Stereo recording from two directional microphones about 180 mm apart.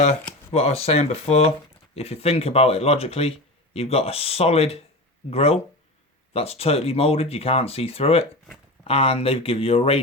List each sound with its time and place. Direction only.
0.5 s speech: 35° left (ahead or behind)